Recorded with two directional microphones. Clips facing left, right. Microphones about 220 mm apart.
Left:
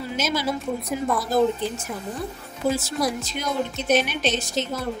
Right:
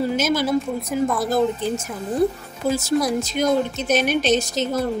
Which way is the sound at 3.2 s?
45° right (ahead or behind).